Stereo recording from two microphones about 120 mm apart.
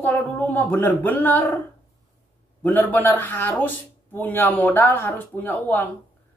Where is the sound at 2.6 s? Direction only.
15° left (ahead or behind).